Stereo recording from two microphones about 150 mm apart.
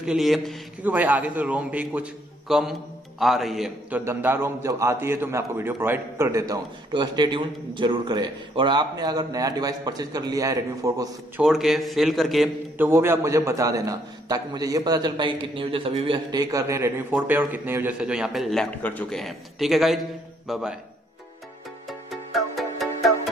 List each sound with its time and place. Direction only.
0.0 s a man's voice: 5° right (ahead or behind)
0.8 s a man's voice: 10° right (ahead or behind)
4.0 s a man's voice: 15° right (ahead or behind)
11.4 s a man's voice: centre (ahead or behind)
12.7 s a man's voice: 15° right (ahead or behind)
18.0 s a man's voice: 5° right (ahead or behind)
21.8 s music: centre (ahead or behind)